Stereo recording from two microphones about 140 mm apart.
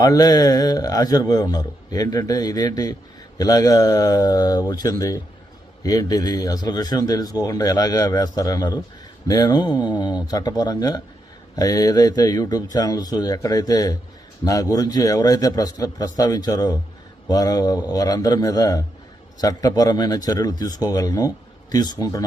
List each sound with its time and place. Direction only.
0.0 s speech: 25° left (ahead or behind)